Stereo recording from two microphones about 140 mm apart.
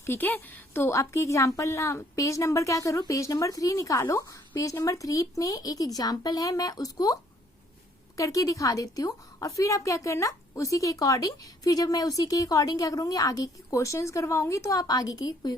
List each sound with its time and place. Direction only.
0.0 s a woman's voice: 15° left (ahead or behind)